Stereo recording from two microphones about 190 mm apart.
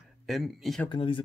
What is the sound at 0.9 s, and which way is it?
Speech, 25° left (ahead or behind).